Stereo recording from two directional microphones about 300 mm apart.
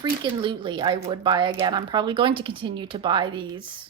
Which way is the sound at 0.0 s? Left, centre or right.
Centre.